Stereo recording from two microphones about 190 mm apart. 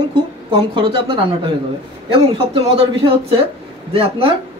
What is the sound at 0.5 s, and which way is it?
Speech, 25° right (ahead or behind).